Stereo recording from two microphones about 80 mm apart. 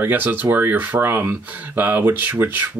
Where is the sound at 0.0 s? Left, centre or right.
Right.